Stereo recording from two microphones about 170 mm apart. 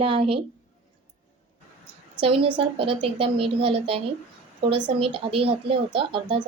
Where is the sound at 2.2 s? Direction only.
30° right (ahead or behind).